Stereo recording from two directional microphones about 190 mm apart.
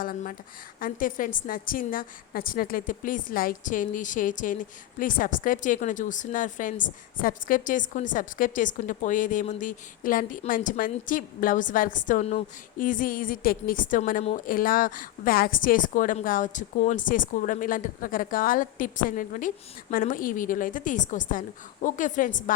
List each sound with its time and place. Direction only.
0.0 s a woman's voice: 50° left (ahead or behind)